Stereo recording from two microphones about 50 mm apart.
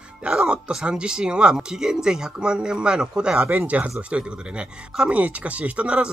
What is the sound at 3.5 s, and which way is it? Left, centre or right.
Speech, right.